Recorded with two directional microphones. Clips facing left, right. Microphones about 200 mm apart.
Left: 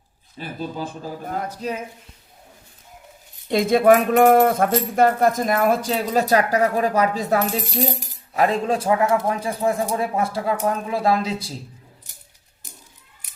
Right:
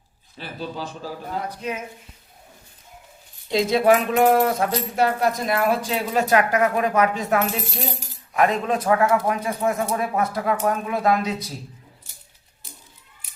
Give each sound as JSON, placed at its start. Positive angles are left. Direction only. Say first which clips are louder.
{"t": 0.3, "sound": "speech", "louder": "left 2 dB", "side_deg": 45}
{"t": 1.5, "sound": "speech", "louder": "left 2 dB", "side_deg": 35}
{"t": 3.5, "sound": "speech", "louder": "left 3 dB", "side_deg": 50}
{"t": 7.4, "sound": "speech", "louder": "left 4 dB", "side_deg": 15}
{"t": 8.3, "sound": "speech", "louder": "left 1 dB", "side_deg": 30}